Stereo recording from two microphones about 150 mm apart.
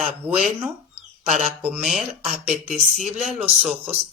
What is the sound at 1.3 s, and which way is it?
Speech, 60° right (ahead or behind).